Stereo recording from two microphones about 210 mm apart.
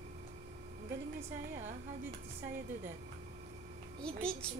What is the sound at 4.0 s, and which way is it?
Speech, 5° left (ahead or behind).